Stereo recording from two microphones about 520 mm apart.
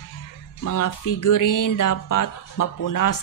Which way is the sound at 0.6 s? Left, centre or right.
Left.